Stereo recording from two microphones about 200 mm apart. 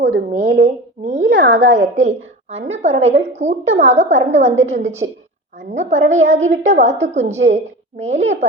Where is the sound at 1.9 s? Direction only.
35° right (ahead or behind).